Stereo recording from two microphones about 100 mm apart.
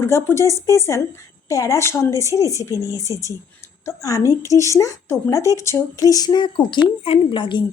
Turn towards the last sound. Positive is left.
turn(degrees=55)  # may be behind; listen again after turning